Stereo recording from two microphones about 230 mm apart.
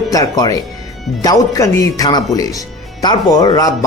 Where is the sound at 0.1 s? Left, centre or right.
Centre.